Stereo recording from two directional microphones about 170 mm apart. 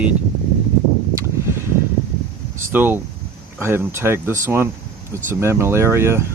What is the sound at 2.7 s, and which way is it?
Speech, 10° right (ahead or behind).